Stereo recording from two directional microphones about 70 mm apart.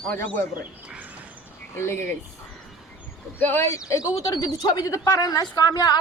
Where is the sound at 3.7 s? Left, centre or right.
Left.